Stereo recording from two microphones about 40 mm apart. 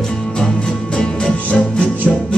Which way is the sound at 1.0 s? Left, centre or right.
Left.